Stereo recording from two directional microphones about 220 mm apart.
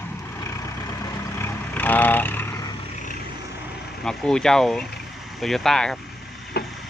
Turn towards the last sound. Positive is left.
turn(degrees=45)  # may be behind; listen again after turning